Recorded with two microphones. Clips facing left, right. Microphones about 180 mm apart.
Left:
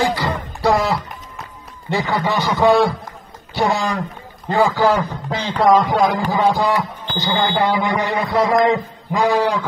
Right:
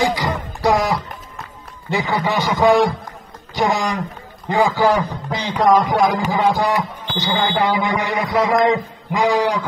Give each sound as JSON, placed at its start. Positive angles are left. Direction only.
{"t": 0.0, "sound": "music", "side_deg": -15}
{"t": 1.9, "sound": "a man's voice", "side_deg": -15}